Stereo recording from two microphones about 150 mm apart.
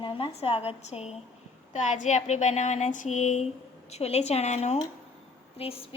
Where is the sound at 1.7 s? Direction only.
55° left (ahead or behind).